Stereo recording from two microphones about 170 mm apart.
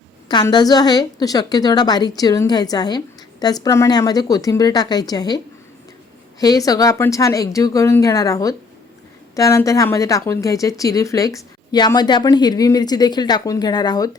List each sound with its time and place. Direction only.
0.3 s speech: 25° left (ahead or behind)
6.4 s speech: 20° left (ahead or behind)